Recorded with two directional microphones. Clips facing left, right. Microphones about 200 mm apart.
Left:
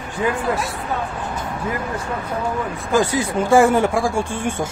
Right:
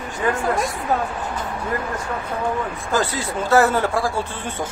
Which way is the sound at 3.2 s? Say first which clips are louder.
Left 2 dB; 15° left (ahead or behind).